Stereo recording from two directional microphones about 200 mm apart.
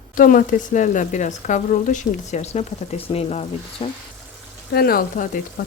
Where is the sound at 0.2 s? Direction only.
45° left (ahead or behind).